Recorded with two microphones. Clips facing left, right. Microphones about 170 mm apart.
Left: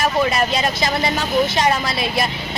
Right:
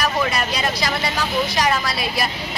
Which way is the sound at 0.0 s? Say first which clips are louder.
Left 3 dB; 25° left (ahead or behind).